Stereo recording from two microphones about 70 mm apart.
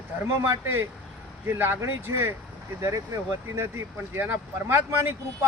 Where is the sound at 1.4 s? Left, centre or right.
Right.